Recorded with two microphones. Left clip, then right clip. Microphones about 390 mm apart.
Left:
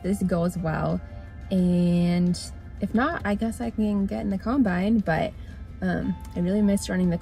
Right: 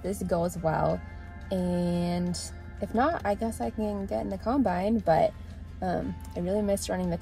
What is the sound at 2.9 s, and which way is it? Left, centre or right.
Speech, right.